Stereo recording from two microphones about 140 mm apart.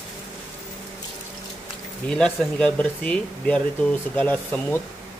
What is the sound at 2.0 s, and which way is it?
Speech, 5° left (ahead or behind).